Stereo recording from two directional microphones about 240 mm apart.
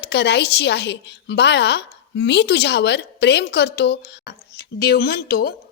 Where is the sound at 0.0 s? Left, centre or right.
Left.